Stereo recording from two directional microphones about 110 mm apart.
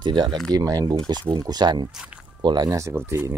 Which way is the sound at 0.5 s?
35° right (ahead or behind).